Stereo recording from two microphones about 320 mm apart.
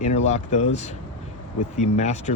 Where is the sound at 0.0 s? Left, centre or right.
Left.